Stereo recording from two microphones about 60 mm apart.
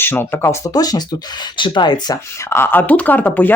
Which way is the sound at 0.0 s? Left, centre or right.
Left.